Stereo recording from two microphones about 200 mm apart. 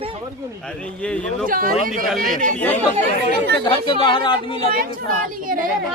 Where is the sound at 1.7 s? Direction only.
Centre (ahead or behind).